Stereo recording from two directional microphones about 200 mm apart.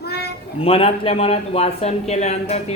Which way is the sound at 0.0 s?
55° left (ahead or behind).